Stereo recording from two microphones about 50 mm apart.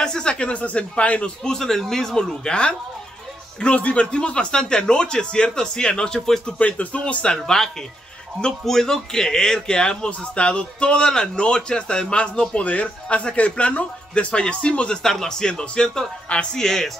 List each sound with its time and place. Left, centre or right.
0.0 s a man's voice: centre
1.5 s speech: centre
3.7 s a man's voice: left; by 6.4 s centre
6.4 s a man's voice: left
7.4 s a man's voice: centre
15.0 s speech: centre